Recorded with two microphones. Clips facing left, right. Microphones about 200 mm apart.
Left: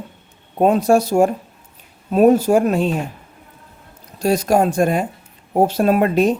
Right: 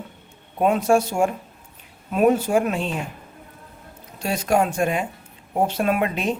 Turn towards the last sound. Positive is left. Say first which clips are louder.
# left 7 dB
turn(degrees=40)  # may be behind; listen again after turning